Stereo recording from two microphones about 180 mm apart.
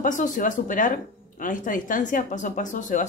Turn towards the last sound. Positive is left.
turn(degrees=45)  # may be behind; listen again after turning